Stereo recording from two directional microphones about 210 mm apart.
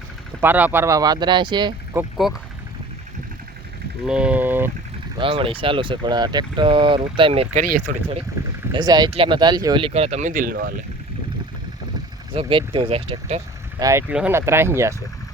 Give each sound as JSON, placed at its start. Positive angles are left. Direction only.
{"t": 0.4, "sound": "speech", "side_deg": -10}
{"t": 2.0, "sound": "speech", "side_deg": 0}
{"t": 4.0, "sound": "speech", "side_deg": -5}
{"t": 5.1, "sound": "speech", "side_deg": -25}
{"t": 7.9, "sound": "speech", "side_deg": -40}
{"t": 8.7, "sound": "speech", "side_deg": -20}
{"t": 12.3, "sound": "speech", "side_deg": -25}
{"t": 13.7, "sound": "speech", "side_deg": -15}